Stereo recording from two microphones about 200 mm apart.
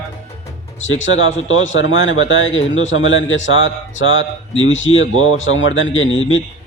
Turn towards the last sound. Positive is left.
turn(degrees=75)  # may be behind; listen again after turning